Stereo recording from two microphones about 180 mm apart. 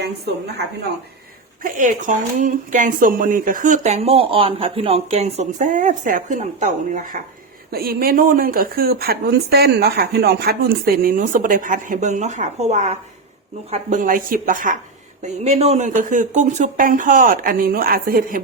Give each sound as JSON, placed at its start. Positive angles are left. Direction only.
{"t": 0.0, "sound": "a woman's voice", "side_deg": -65}
{"t": 1.6, "sound": "a woman's voice", "side_deg": -45}